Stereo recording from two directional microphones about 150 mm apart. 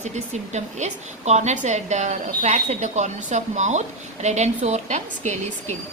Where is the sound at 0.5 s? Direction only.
50° right (ahead or behind).